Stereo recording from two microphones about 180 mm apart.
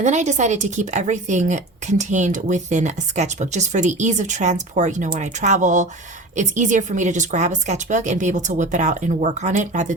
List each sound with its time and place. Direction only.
0.0 s a woman's voice: 40° right (ahead or behind)